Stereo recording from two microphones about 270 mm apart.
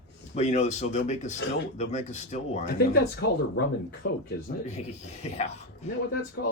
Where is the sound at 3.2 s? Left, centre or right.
Left.